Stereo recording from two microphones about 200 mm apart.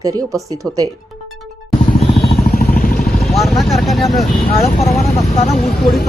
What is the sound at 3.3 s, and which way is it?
Speech, centre (ahead or behind).